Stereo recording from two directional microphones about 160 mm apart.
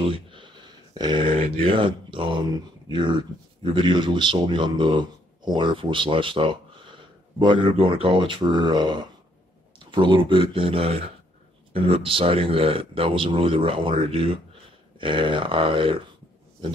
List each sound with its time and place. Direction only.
0.1 s a sound: 30° right (ahead or behind)
0.9 s a man's voice: 30° right (ahead or behind)
15.0 s a man's voice: 30° right (ahead or behind)